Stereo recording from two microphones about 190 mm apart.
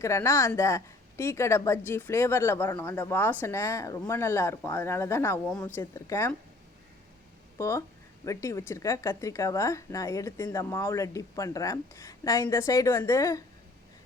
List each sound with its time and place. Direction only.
0.0 s speech: 15° left (ahead or behind)
7.6 s speech: 15° left (ahead or behind)